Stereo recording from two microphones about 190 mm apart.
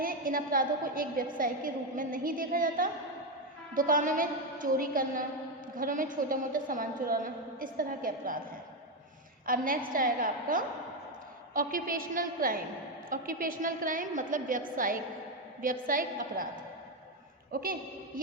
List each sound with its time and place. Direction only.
0.0 s a woman's voice: 50° right (ahead or behind)
9.5 s a woman's voice: 50° right (ahead or behind)
17.5 s a woman's voice: 50° right (ahead or behind)